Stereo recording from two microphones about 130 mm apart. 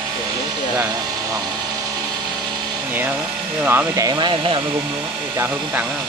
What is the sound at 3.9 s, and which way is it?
Speech, 30° right (ahead or behind).